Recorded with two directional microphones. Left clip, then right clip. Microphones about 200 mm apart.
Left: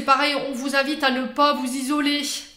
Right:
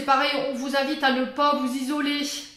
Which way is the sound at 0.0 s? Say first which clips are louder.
Left 2 dB; 45° left (ahead or behind).